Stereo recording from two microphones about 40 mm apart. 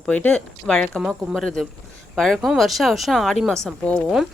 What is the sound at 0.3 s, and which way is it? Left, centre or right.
Speech, left.